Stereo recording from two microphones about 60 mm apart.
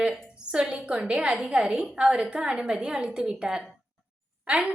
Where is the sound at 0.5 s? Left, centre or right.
Centre.